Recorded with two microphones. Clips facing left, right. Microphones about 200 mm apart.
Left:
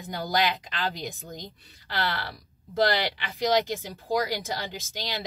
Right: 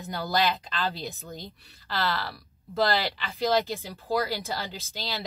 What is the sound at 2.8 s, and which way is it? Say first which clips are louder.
Speech: left 1 dB; 15° left (ahead or behind).